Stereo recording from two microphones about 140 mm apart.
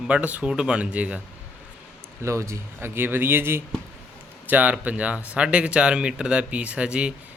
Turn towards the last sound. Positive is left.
turn(degrees=-5)  # may be behind; listen again after turning